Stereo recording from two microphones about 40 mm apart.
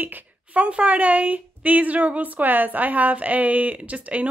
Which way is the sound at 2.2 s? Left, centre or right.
Right.